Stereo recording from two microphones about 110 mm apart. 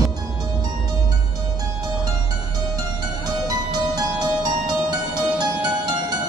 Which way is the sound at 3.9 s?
35° right (ahead or behind).